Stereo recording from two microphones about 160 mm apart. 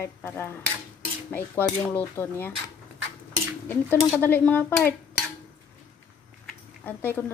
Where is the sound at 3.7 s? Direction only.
10° left (ahead or behind).